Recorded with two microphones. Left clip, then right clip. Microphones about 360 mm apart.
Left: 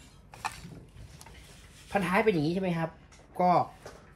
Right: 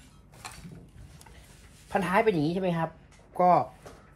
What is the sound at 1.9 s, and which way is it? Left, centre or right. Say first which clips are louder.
Speech: right 2 dB; centre.